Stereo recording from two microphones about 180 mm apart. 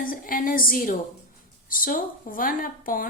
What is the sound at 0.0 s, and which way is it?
A woman's voice, 50° left (ahead or behind).